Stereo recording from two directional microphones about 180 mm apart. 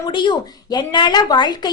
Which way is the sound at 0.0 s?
25° left (ahead or behind).